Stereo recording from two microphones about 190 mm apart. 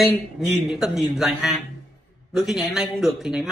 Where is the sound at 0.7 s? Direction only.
Centre (ahead or behind).